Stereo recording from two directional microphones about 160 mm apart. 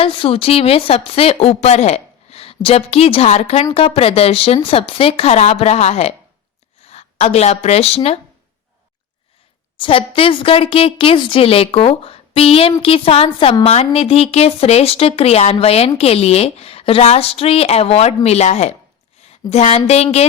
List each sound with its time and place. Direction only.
0.0 s speech: 35° left (ahead or behind)
9.7 s speech: 35° left (ahead or behind)